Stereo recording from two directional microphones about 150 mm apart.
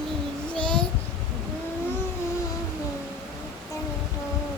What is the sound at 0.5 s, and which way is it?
Child singing, 5° left (ahead or behind).